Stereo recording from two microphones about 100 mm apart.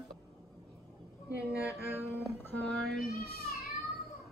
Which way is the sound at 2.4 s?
15° left (ahead or behind).